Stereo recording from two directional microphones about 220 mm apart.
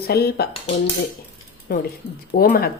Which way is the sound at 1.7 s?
45° left (ahead or behind).